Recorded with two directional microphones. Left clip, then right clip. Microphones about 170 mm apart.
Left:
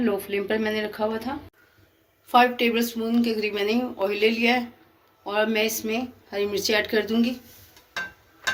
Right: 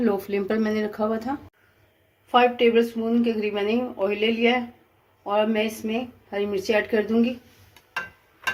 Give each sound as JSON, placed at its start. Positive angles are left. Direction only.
{"t": 0.0, "sound": "speech", "side_deg": -65}
{"t": 2.3, "sound": "speech", "side_deg": -40}